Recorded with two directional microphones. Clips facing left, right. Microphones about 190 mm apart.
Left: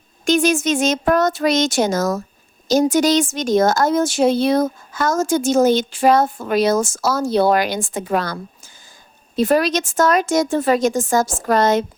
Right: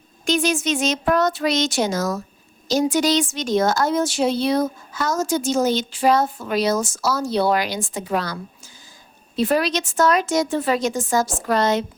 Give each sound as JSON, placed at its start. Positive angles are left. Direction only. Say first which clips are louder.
{"t": 0.3, "sound": "a woman's voice", "louder": "left 4 dB", "side_deg": 50}